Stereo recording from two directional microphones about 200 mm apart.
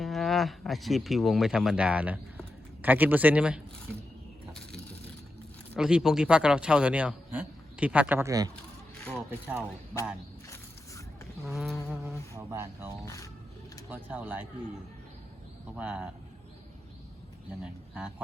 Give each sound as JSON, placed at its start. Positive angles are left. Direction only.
{"t": 0.0, "sound": "a man's voice", "side_deg": 0}
{"t": 5.7, "sound": "a man's voice", "side_deg": -5}
{"t": 9.6, "sound": "speech", "side_deg": 15}
{"t": 11.4, "sound": "a man's voice", "side_deg": 0}
{"t": 12.5, "sound": "a man's voice", "side_deg": -10}
{"t": 13.9, "sound": "a man's voice", "side_deg": -10}
{"t": 15.7, "sound": "a man's voice", "side_deg": -5}
{"t": 17.6, "sound": "speech", "side_deg": -5}